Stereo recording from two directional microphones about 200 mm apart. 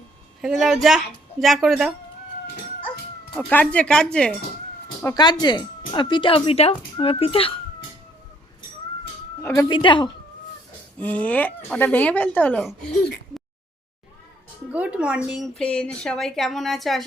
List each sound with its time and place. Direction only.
0.4 s a woman's voice: centre (ahead or behind)
3.3 s a woman's voice: 5° left (ahead or behind)
5.0 s speech: 20° left (ahead or behind)
9.4 s speech: 20° left (ahead or behind)
11.0 s speech: 5° left (ahead or behind)
14.7 s a woman's voice: 5° right (ahead or behind)